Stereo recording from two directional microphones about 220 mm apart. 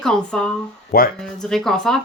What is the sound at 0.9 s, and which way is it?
Speech, 45° left (ahead or behind).